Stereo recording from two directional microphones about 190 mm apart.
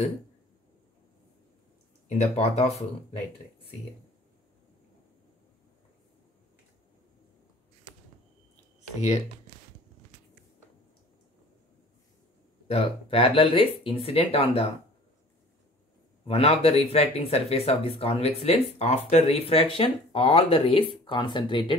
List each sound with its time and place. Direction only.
2.0 s speech: 35° left (ahead or behind)
12.6 s speech: 30° left (ahead or behind)
16.3 s speech: 30° left (ahead or behind)